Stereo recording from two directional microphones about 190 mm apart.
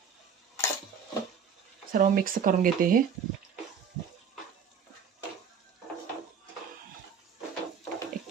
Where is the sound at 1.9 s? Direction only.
45° right (ahead or behind).